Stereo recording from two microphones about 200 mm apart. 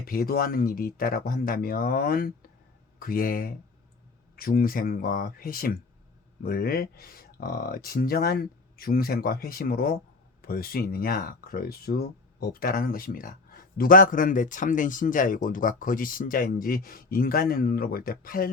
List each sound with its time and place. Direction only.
0.0 s speech: 45° left (ahead or behind)